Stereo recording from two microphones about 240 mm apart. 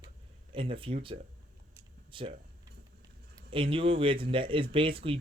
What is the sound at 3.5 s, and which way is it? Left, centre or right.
Speech, right.